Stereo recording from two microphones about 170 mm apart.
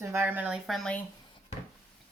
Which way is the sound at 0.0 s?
15° right (ahead or behind).